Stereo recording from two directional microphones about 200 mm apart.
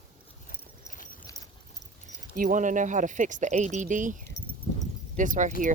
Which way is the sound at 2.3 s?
40° right (ahead or behind).